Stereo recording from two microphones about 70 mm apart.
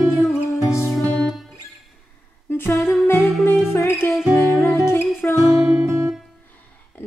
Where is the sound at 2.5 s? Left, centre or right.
Left.